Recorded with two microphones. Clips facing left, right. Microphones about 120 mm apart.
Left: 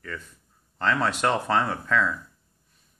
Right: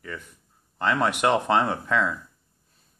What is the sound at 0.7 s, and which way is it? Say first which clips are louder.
Speech: right 1 dB; 15° right (ahead or behind).